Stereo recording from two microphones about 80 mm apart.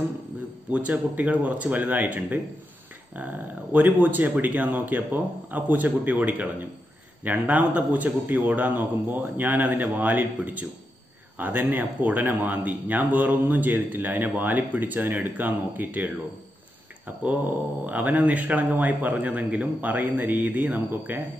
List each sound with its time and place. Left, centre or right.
0.7 s a man's voice: centre
3.7 s a man's voice: right
17.8 s a man's voice: centre